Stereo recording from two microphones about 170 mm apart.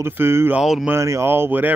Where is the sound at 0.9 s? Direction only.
15° right (ahead or behind).